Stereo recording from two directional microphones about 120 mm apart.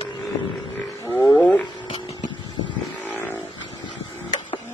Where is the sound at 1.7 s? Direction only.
40° left (ahead or behind).